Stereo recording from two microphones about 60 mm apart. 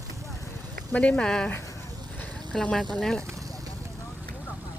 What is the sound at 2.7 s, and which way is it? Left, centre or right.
Speech, centre.